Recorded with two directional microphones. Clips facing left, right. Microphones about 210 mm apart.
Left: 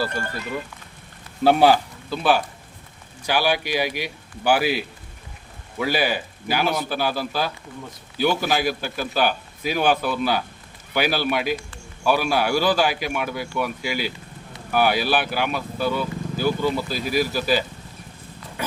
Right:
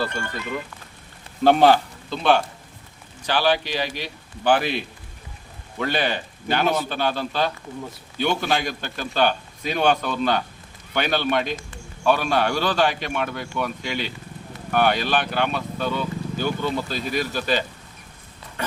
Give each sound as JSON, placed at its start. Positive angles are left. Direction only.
{"t": 0.1, "sound": "speech", "side_deg": 35}
{"t": 1.5, "sound": "speech", "side_deg": 10}